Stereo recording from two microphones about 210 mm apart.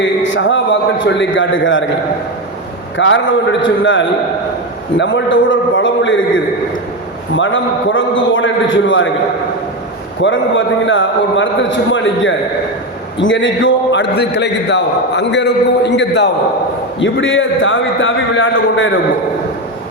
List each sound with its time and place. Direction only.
0.0 s a man's voice: 60° left (ahead or behind)
3.0 s a man's voice: 65° left (ahead or behind)
10.2 s a man's voice: 65° left (ahead or behind)